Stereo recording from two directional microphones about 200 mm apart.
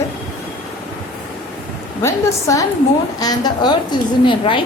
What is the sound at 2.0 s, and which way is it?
A woman's voice, 15° left (ahead or behind).